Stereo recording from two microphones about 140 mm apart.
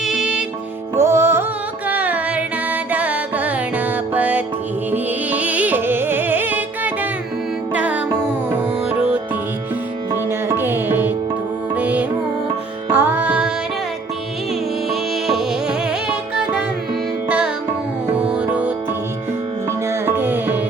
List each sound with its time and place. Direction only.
0.0 s music: 5° right (ahead or behind)
0.9 s music: 20° right (ahead or behind)
10.5 s music: 15° right (ahead or behind)
14.8 s music: centre (ahead or behind)
17.2 s music: 10° right (ahead or behind)